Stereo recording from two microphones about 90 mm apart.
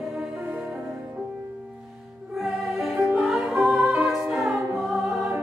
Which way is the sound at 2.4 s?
Centre (ahead or behind).